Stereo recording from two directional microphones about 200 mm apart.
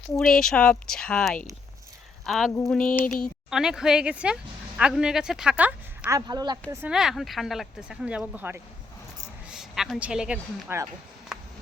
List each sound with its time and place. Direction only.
0.2 s speech: 5° left (ahead or behind)
3.0 s speech: 45° left (ahead or behind)
3.5 s speech: centre (ahead or behind); by 6.7 s 20° right (ahead or behind)
6.8 s speech: 5° right (ahead or behind)
11.3 s a sound: 5° right (ahead or behind)